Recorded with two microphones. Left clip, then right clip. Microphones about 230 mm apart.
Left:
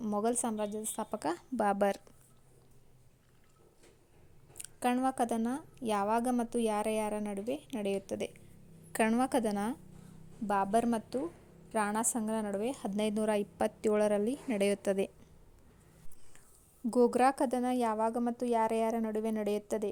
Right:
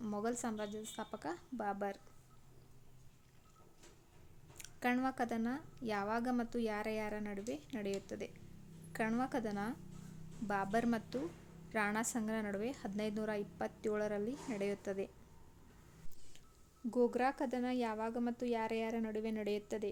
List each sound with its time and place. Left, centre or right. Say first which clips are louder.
0.0 s a woman's voice: left 7 dB; left
4.5 s a woman's voice: left 5 dB; centre; by 9.7 s left
10.4 s a woman's voice: left 7 dB; left
16.9 s a woman's voice: left 8 dB; left